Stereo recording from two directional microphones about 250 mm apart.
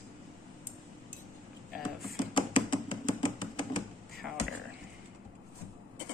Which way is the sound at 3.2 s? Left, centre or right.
Centre.